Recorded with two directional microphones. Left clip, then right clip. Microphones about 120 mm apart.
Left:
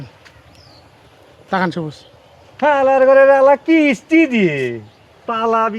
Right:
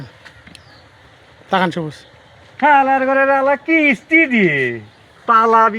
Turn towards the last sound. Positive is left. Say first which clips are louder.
# right 4 dB
turn(degrees=25)  # may be behind; listen again after turning